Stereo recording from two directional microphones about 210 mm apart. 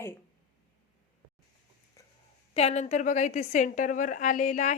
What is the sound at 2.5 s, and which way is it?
A woman's voice, 30° left (ahead or behind).